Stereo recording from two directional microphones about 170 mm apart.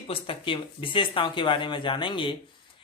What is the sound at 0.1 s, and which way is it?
Speech, 30° left (ahead or behind).